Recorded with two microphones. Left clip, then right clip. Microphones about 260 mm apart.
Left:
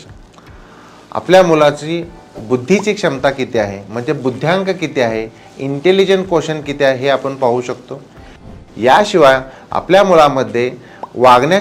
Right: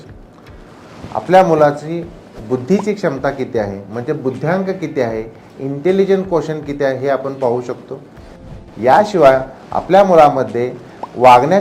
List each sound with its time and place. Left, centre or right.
1.1 s speech: left